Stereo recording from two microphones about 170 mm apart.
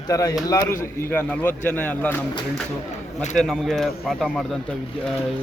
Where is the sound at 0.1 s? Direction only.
20° left (ahead or behind).